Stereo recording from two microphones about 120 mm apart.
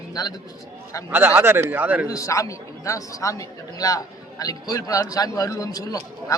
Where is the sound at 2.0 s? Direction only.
25° left (ahead or behind).